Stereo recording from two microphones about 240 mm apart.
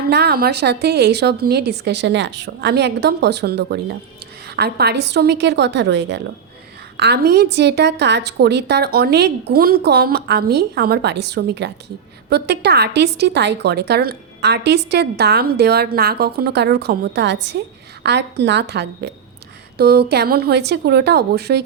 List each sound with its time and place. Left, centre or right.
0.1 s a woman's voice: right